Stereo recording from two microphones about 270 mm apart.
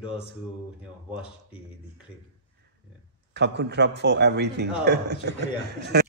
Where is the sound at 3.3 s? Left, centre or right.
Right.